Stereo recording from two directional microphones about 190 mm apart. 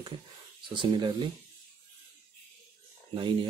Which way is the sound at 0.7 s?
25° right (ahead or behind).